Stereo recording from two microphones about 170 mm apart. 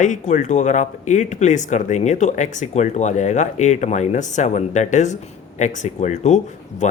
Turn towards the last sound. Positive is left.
turn(degrees=45)  # may be behind; listen again after turning